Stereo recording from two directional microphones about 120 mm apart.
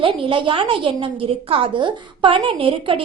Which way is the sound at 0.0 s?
45° right (ahead or behind).